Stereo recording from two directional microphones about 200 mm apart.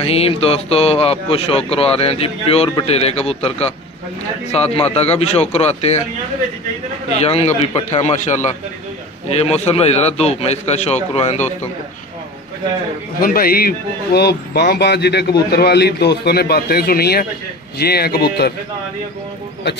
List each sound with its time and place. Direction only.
0.0 s a man's voice: 30° left (ahead or behind)
7.1 s a man's voice: 30° left (ahead or behind)
13.2 s speech: 45° left (ahead or behind)